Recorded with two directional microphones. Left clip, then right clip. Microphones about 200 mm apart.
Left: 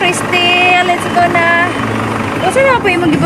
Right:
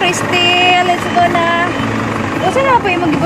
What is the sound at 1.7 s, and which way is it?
Vehicle, 45° left (ahead or behind).